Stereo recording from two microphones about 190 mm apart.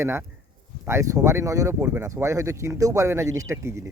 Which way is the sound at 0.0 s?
15° right (ahead or behind).